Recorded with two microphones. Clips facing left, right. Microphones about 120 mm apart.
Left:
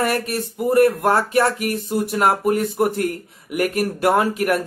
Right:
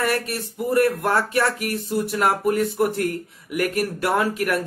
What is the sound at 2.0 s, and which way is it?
Speech, 20° left (ahead or behind).